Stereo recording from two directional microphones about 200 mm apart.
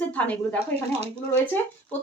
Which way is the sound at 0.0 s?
5° left (ahead or behind).